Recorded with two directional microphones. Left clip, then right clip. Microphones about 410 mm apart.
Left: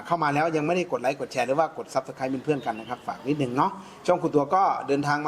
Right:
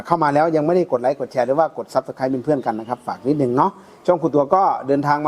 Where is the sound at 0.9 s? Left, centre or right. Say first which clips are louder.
Right 7 dB; right.